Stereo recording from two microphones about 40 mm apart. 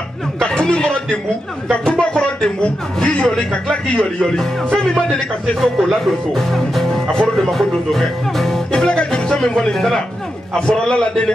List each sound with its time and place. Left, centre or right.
0.4 s a man's voice: left
5.6 s speech: centre
7.3 s music: centre
8.8 s a man's voice: left